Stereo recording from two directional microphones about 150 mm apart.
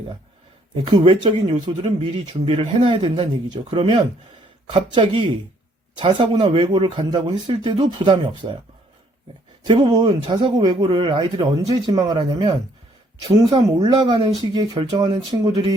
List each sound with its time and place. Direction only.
0.9 s speech: 35° right (ahead or behind)
9.6 s speech: 30° right (ahead or behind)
13.7 s speech: 30° right (ahead or behind)